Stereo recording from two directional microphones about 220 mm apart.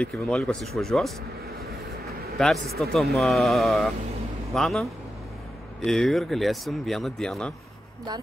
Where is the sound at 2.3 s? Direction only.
Centre (ahead or behind).